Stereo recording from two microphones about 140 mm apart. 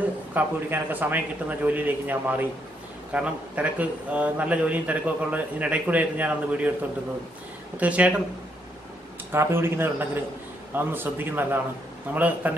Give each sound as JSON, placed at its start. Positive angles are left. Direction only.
{"t": 0.3, "sound": "a man's voice", "side_deg": -15}
{"t": 7.7, "sound": "a man's voice", "side_deg": -10}
{"t": 9.3, "sound": "a man's voice", "side_deg": -15}